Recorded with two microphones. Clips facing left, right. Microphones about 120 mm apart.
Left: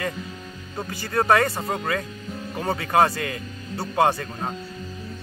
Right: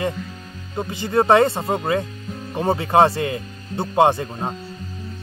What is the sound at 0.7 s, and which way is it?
Speech, 20° right (ahead or behind).